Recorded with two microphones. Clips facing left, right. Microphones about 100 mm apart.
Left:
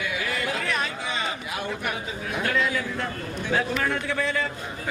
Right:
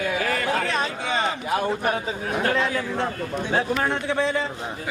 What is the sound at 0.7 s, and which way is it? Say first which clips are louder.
Speech: right 3 dB; 30° right (ahead or behind).